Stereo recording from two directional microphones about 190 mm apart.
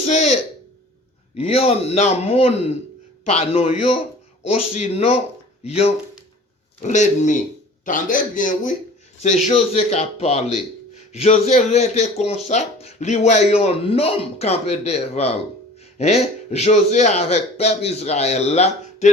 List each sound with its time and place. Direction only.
0.0 s throat clearing: 35° left (ahead or behind)
1.4 s speech: 30° left (ahead or behind)